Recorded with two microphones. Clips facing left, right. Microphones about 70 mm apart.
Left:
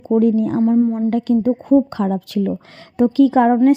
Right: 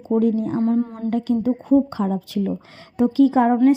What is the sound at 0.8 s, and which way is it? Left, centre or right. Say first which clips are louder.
Speech: left 8 dB; centre.